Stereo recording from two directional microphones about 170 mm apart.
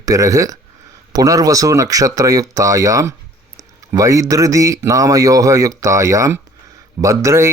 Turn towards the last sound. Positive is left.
turn(degrees=-15)  # may be behind; listen again after turning